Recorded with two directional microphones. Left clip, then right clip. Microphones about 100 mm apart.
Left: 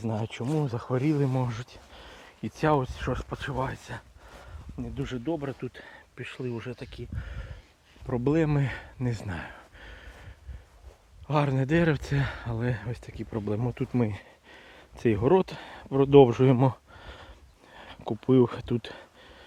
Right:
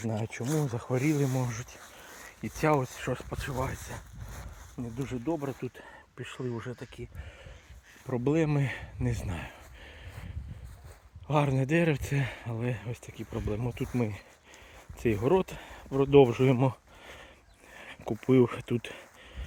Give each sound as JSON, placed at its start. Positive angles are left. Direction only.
{"t": 0.1, "sound": "speech", "side_deg": 10}
{"t": 5.0, "sound": "speech", "side_deg": 10}
{"t": 6.7, "sound": "speech", "side_deg": 25}
{"t": 7.3, "sound": "a sound", "side_deg": 40}
{"t": 8.0, "sound": "speech", "side_deg": 20}
{"t": 9.9, "sound": "a sound", "side_deg": 5}
{"t": 11.3, "sound": "speech", "side_deg": -5}
{"t": 11.5, "sound": "speech", "side_deg": 15}
{"t": 13.3, "sound": "speech", "side_deg": 65}
{"t": 17.7, "sound": "a sound", "side_deg": 30}
{"t": 18.1, "sound": "speech", "side_deg": 25}